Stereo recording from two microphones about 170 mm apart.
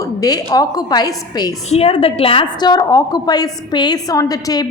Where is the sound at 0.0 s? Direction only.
20° left (ahead or behind).